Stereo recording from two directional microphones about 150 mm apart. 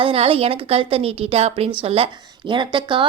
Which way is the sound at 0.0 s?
40° right (ahead or behind).